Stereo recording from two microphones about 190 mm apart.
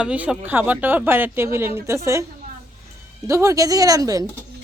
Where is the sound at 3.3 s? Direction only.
15° right (ahead or behind).